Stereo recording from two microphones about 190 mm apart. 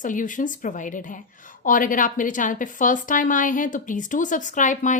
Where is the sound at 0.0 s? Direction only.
45° left (ahead or behind).